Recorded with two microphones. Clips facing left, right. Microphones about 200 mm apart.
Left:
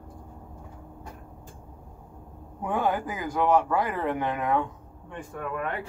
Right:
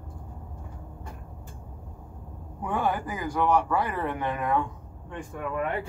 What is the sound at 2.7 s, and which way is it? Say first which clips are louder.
Speech: left 1 dB; 20° left (ahead or behind).